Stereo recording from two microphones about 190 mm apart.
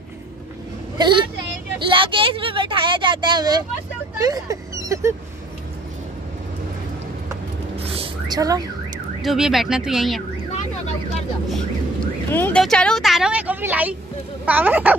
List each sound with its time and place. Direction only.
0.9 s a woman's voice: 25° right (ahead or behind)
7.7 s a sound: 30° right (ahead or behind)
9.2 s speech: centre (ahead or behind)
11.5 s speech: 10° left (ahead or behind); by 15.0 s 10° right (ahead or behind)